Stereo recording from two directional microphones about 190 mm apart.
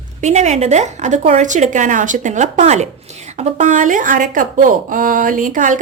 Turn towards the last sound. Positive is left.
turn(degrees=-45)  # may be behind; listen again after turning